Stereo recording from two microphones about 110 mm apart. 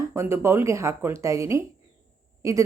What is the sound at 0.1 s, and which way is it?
A woman's voice, 20° right (ahead or behind).